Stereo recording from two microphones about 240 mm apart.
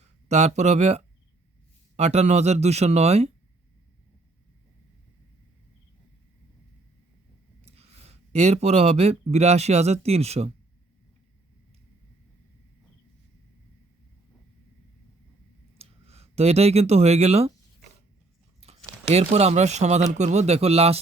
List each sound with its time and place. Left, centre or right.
0.0 s speech: right
7.6 s speech: right
15.8 s speech: right
19.1 s speech: right